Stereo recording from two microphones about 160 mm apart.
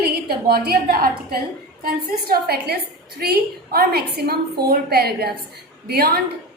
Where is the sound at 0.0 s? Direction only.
75° right (ahead or behind).